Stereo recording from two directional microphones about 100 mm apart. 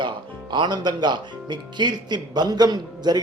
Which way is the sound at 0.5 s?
50° right (ahead or behind).